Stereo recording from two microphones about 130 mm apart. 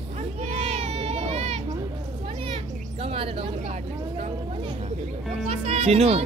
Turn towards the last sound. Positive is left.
turn(degrees=-50)  # may be behind; listen again after turning